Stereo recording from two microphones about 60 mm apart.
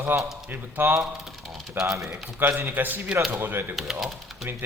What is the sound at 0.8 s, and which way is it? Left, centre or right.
Speech, right.